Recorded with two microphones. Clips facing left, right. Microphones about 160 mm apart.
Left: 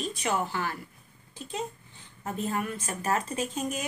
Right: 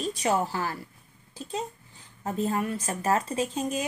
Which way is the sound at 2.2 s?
30° right (ahead or behind).